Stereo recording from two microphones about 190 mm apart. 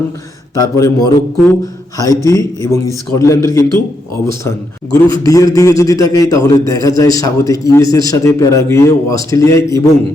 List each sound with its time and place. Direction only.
0.5 s a man's voice: 20° left (ahead or behind)